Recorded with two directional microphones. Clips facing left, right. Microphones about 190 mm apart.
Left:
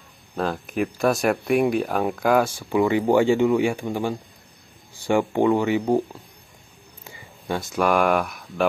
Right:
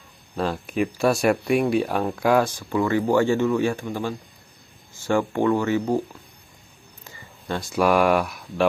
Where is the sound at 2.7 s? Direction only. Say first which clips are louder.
Left 3 dB; 15° left (ahead or behind).